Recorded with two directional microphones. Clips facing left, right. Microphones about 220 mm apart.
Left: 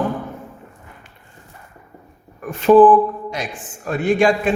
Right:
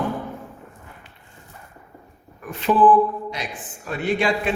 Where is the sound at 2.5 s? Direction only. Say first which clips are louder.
Left 8 dB; 45° left (ahead or behind).